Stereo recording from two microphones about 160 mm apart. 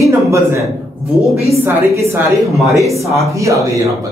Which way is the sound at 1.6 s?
15° right (ahead or behind).